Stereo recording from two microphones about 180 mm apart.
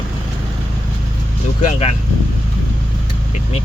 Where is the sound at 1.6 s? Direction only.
40° left (ahead or behind).